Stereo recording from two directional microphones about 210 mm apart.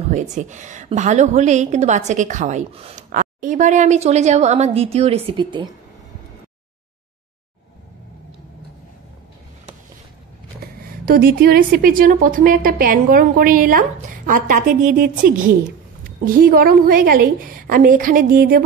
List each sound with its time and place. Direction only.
0.1 s a woman's voice: 35° right (ahead or behind)
10.6 s a woman's voice: 45° right (ahead or behind)